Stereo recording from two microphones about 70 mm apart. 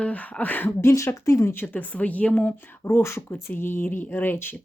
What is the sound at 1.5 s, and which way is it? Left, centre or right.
Speech, left.